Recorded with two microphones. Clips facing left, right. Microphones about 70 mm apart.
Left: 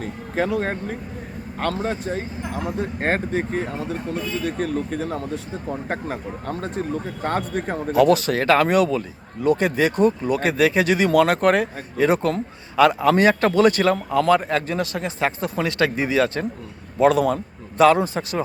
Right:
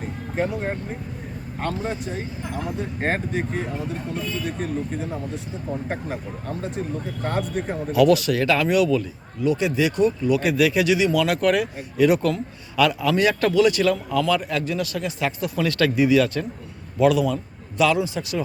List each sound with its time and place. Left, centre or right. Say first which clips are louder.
0.0 s music: left 2 dB; left
1.8 s speech: left 3 dB; left
4.4 s speech: left 3 dB; left
7.3 s a man's voice: left 1 dB; left
7.9 s a man's voice: even; left